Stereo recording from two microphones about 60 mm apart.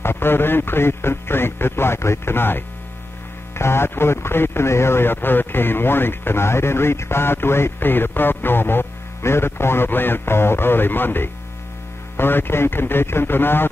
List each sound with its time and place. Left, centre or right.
0.0 s speech: left